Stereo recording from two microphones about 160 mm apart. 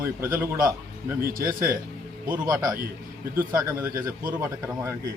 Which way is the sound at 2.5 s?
25° right (ahead or behind).